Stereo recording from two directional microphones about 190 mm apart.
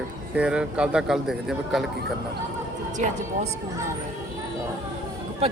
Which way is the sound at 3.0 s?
40° right (ahead or behind).